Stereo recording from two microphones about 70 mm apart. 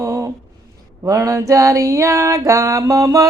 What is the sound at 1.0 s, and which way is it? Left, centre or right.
Music, right.